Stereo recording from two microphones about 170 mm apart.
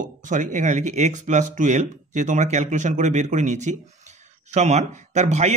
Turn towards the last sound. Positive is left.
turn(degrees=-45)  # may be behind; listen again after turning